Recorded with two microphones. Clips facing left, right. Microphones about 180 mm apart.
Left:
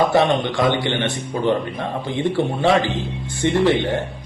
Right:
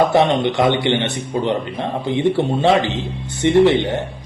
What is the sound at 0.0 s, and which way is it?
Speech, 20° right (ahead or behind).